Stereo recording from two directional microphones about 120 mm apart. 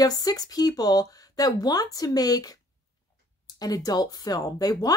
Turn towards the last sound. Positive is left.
turn(degrees=30)  # may be behind; listen again after turning